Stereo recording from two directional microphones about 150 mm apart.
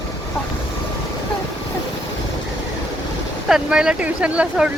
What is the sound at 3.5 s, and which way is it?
Speech, 5° right (ahead or behind).